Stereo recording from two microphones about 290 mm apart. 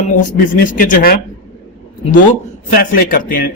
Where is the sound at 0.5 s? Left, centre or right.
Left.